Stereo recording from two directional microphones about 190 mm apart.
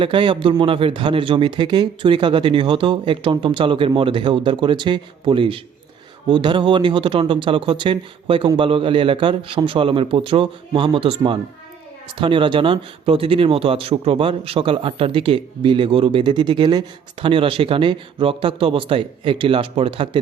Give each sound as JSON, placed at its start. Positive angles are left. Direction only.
{"t": 0.0, "sound": "speech", "side_deg": -25}